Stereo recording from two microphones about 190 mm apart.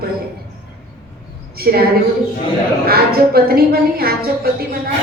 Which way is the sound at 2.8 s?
55° right (ahead or behind).